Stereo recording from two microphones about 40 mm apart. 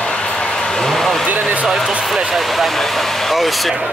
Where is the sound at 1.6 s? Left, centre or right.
Centre.